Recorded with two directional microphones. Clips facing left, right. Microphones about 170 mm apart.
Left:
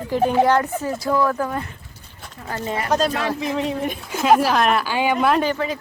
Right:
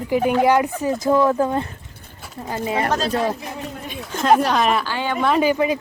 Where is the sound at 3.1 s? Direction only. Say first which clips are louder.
Even; 90° left.